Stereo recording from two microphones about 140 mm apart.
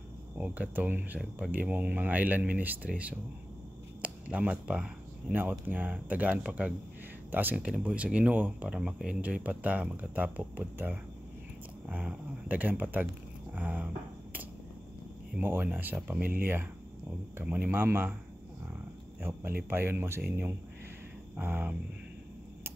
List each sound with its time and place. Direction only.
0.4 s speech: 10° right (ahead or behind)
13.6 s finger snapping: 10° right (ahead or behind)
15.3 s speech: 15° right (ahead or behind)
17.4 s speech: 15° right (ahead or behind)
19.7 s speech: 15° right (ahead or behind)